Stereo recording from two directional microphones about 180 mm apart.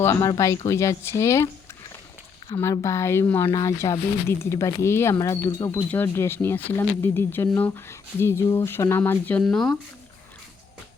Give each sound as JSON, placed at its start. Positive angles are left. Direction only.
{"t": 0.0, "sound": "speech", "side_deg": 15}
{"t": 2.6, "sound": "speech", "side_deg": 15}